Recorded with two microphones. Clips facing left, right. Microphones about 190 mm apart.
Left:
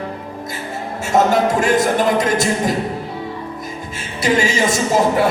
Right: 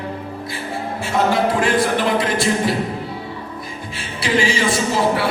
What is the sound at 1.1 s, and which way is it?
Music, 45° left (ahead or behind).